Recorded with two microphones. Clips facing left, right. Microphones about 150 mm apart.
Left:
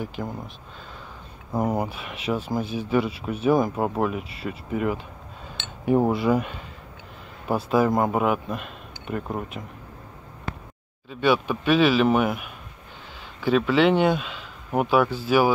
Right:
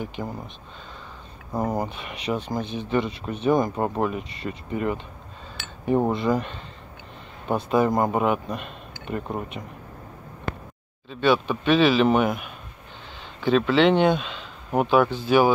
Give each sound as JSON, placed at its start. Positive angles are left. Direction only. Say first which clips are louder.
{"t": 0.2, "sound": "speech", "louder": "even", "side_deg": 0}
{"t": 1.5, "sound": "speech", "louder": "left 1 dB", "side_deg": 10}
{"t": 10.5, "sound": "a sound", "louder": "right 3 dB", "side_deg": -60}
{"t": 11.1, "sound": "speech", "louder": "right 1 dB", "side_deg": 10}